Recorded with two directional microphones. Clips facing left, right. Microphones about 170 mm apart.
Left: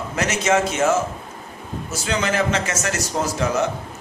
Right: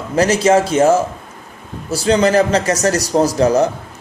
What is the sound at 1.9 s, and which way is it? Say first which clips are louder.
Speech: right 10 dB; 35° right (ahead or behind).